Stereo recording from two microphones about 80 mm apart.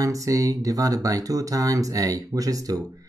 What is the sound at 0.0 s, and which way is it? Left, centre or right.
Speech, right.